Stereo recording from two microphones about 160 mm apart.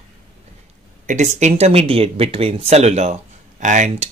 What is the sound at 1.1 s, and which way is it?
Speech, 50° right (ahead or behind).